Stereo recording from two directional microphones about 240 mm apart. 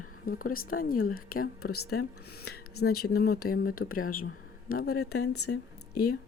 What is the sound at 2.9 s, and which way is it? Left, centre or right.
Speech, left.